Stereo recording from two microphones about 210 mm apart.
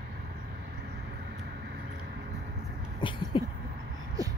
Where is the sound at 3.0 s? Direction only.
25° left (ahead or behind).